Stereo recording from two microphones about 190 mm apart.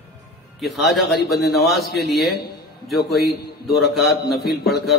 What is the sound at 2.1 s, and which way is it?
A man's voice, centre (ahead or behind).